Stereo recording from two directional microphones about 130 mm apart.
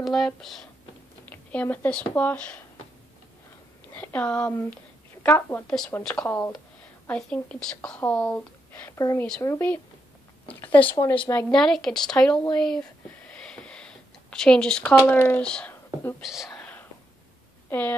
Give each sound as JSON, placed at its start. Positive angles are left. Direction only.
{"t": 0.0, "sound": "speech", "side_deg": 0}
{"t": 3.9, "sound": "speech", "side_deg": 10}
{"t": 7.1, "sound": "speech", "side_deg": 10}
{"t": 8.9, "sound": "speech", "side_deg": 25}
{"t": 13.3, "sound": "a sound", "side_deg": 5}
{"t": 16.2, "sound": "speech", "side_deg": 0}
{"t": 17.6, "sound": "speech", "side_deg": 15}